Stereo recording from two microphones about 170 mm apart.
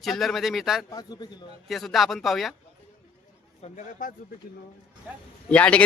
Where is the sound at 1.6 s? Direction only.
Centre (ahead or behind).